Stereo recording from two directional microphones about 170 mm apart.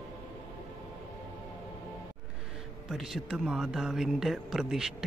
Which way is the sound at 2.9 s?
Centre (ahead or behind).